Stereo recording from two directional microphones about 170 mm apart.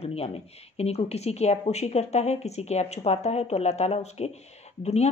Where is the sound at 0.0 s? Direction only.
35° left (ahead or behind).